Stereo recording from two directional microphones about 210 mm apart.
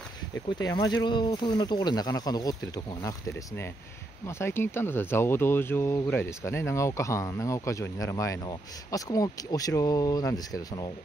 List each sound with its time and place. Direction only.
0.5 s speech: 20° left (ahead or behind)